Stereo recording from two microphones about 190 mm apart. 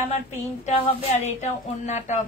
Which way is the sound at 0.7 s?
35° left (ahead or behind).